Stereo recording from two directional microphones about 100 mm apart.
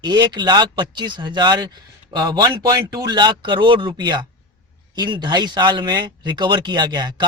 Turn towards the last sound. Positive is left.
turn(degrees=-45)  # may be behind; listen again after turning